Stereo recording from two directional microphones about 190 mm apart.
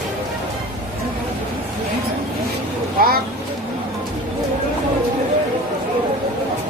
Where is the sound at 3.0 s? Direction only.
50° right (ahead or behind).